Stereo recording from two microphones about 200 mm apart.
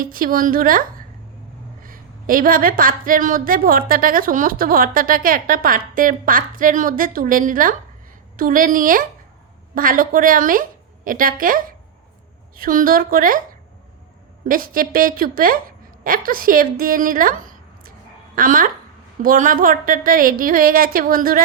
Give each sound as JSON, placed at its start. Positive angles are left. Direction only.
{"t": 0.0, "sound": "a woman's voice", "side_deg": -45}
{"t": 14.4, "sound": "a woman's voice", "side_deg": -45}